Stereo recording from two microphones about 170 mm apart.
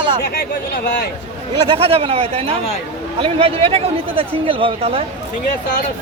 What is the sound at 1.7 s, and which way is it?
Speech, 35° right (ahead or behind).